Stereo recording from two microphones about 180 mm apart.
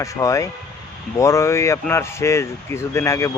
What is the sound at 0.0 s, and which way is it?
Speech, 15° left (ahead or behind).